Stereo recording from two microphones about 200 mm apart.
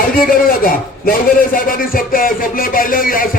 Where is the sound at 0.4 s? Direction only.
45° left (ahead or behind).